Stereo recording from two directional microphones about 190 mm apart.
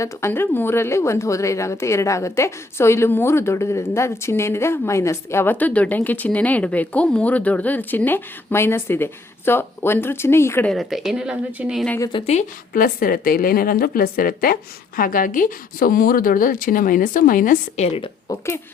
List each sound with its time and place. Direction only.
0.0 s a woman's voice: 15° left (ahead or behind); by 11.9 s 5° right (ahead or behind)
11.9 s a woman's voice: 20° left (ahead or behind)
12.2 s a woman's voice: 35° left (ahead or behind)
18.3 s a woman's voice: 15° left (ahead or behind)